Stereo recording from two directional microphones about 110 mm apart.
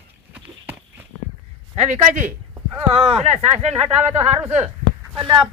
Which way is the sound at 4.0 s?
15° right (ahead or behind).